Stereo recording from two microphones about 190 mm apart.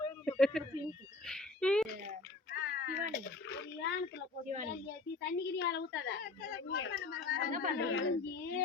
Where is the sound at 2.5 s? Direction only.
55° left (ahead or behind).